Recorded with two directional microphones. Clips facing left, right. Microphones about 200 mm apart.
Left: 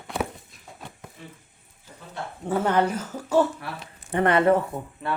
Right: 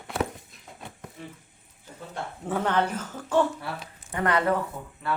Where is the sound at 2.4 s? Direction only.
5° left (ahead or behind).